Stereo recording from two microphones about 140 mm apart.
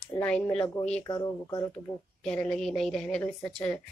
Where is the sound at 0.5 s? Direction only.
20° left (ahead or behind).